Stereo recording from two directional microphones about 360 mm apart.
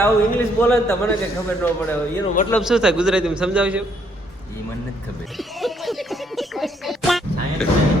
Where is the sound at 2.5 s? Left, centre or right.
Centre.